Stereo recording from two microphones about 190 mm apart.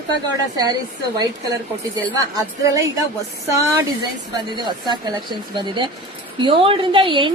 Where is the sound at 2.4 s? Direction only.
20° right (ahead or behind).